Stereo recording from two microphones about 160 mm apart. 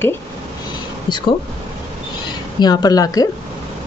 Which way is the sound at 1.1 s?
25° left (ahead or behind).